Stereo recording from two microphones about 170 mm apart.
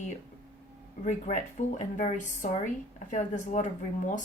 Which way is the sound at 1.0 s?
45° left (ahead or behind).